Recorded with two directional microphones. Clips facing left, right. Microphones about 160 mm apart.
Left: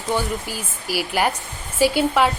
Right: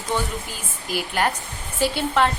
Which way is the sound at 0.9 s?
5° left (ahead or behind).